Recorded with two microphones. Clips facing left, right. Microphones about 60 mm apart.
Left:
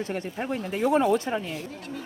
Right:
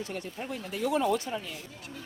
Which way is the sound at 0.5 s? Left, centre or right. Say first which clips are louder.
Left 6 dB; left.